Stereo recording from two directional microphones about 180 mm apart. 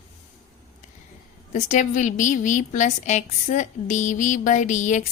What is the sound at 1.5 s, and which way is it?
A woman's voice, 40° left (ahead or behind).